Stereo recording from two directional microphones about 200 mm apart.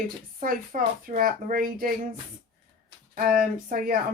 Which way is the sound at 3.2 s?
45° right (ahead or behind).